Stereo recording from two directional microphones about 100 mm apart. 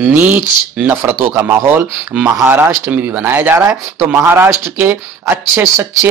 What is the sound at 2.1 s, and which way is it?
Speech, 10° right (ahead or behind).